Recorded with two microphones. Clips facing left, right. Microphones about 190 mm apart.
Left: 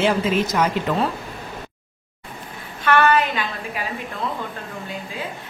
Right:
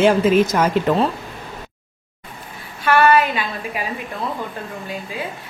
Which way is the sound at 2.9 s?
10° right (ahead or behind).